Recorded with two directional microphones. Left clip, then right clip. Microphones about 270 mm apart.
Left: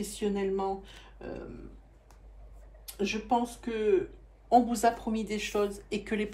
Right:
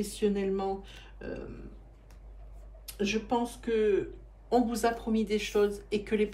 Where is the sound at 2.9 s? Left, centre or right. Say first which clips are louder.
Left 1 dB; left.